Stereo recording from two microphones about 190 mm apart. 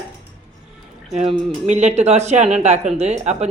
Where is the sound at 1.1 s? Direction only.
35° right (ahead or behind).